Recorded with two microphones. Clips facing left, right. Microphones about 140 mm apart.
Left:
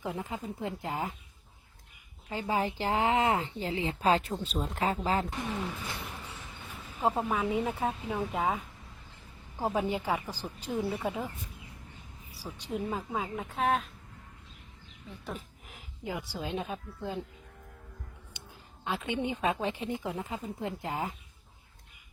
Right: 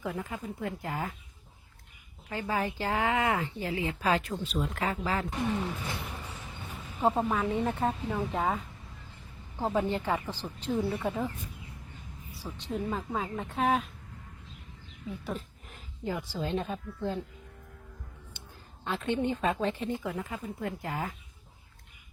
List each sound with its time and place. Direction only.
0.0 s speech: 20° left (ahead or behind)
2.3 s speech: 15° left (ahead or behind)
5.3 s speech: 10° right (ahead or behind)
6.7 s speech: centre (ahead or behind)
12.3 s speech: 10° left (ahead or behind)
15.1 s speech: 5° right (ahead or behind)
15.6 s speech: 15° left (ahead or behind)
18.9 s speech: 10° left (ahead or behind)